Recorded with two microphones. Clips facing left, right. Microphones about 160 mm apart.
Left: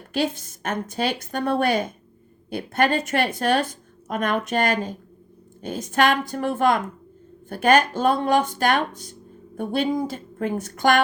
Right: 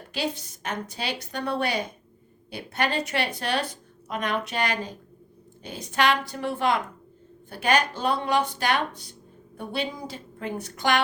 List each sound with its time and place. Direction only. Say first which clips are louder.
0.1 s a woman's voice: left 6 dB; 50° left (ahead or behind)